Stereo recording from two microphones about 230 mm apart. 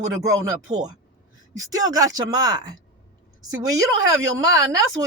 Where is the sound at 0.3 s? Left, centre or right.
Centre.